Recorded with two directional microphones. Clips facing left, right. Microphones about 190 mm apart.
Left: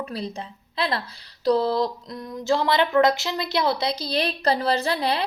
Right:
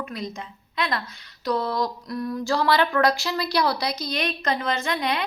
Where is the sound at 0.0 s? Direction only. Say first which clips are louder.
Left 2 dB; 35° left (ahead or behind).